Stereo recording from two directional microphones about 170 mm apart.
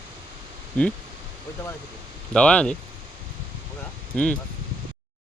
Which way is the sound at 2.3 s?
5° left (ahead or behind).